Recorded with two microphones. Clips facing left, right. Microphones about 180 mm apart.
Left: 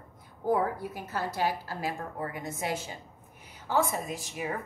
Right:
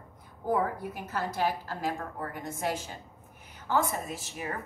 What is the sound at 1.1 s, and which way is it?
A woman's voice, 10° left (ahead or behind).